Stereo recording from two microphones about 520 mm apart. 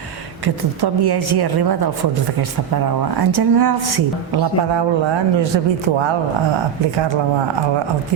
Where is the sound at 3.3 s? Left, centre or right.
Right.